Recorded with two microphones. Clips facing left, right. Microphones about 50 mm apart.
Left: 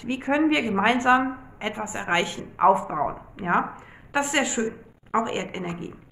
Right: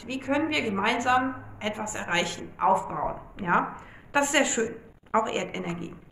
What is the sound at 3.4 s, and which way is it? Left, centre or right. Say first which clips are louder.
A woman's voice: left 1 dB; centre.